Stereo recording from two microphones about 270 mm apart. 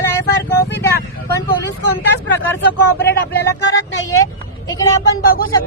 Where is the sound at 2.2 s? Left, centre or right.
Left.